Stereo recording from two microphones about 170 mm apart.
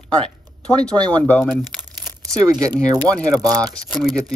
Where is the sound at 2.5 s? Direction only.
20° right (ahead or behind).